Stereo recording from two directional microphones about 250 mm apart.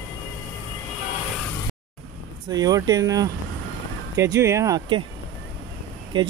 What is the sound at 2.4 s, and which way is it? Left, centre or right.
Speech, centre.